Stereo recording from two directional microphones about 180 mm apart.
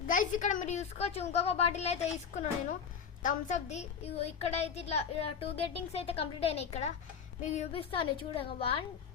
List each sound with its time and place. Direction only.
0.1 s a woman's voice: 45° left (ahead or behind); by 8.4 s 30° left (ahead or behind)